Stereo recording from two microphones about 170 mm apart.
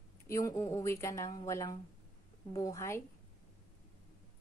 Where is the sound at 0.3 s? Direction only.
20° left (ahead or behind).